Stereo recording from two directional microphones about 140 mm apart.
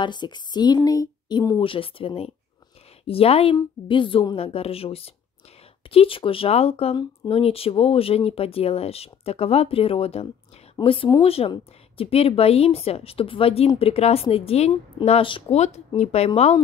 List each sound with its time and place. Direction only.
0.0 s speech: 30° left (ahead or behind)
1.6 s speech: 40° left (ahead or behind)
15.5 s speech: 55° left (ahead or behind)